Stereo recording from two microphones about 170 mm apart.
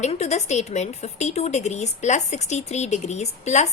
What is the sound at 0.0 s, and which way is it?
A woman's voice, 40° left (ahead or behind).